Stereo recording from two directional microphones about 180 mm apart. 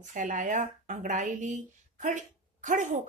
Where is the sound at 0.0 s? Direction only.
45° right (ahead or behind).